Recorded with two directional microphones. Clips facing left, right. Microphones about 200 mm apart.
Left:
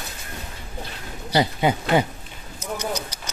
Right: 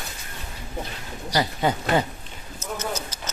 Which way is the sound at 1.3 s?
15° left (ahead or behind).